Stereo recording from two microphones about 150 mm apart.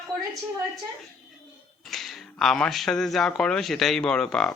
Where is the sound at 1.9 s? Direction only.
Centre (ahead or behind).